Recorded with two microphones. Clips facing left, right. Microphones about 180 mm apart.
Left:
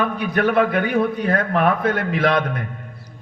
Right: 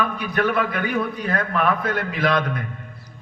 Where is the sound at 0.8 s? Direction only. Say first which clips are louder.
Left 5 dB; 45° left (ahead or behind).